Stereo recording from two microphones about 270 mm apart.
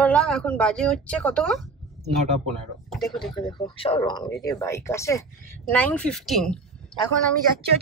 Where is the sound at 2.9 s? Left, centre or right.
Centre.